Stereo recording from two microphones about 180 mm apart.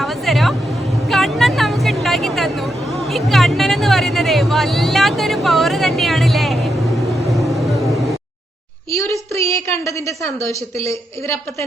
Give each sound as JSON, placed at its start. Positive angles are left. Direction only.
{"t": 0.0, "sound": "a sound", "side_deg": 0}
{"t": 3.1, "sound": "speech", "side_deg": 0}
{"t": 8.9, "sound": "a woman's voice", "side_deg": 15}